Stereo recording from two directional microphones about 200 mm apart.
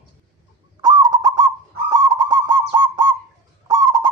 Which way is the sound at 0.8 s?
20° right (ahead or behind).